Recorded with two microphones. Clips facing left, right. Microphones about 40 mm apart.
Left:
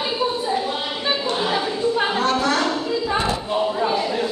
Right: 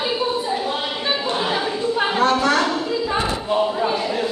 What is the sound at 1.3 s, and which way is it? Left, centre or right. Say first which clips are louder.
Chatter: even; centre.